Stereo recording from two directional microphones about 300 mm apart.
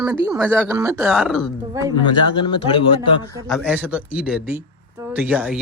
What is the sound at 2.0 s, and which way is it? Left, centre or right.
Speech, centre.